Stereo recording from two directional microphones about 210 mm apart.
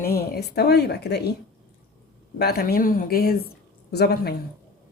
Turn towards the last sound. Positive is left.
turn(degrees=50)  # may be behind; listen again after turning